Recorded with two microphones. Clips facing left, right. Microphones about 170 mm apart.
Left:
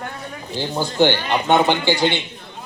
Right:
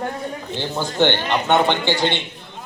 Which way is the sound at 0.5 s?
10° left (ahead or behind).